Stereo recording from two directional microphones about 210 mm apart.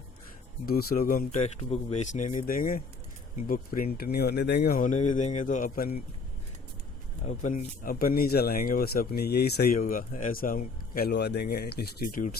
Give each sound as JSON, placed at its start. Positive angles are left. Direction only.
{"t": 0.6, "sound": "speech", "side_deg": 45}
{"t": 7.3, "sound": "speech", "side_deg": 40}